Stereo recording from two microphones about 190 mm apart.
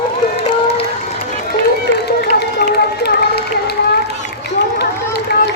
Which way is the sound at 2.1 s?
60° left (ahead or behind).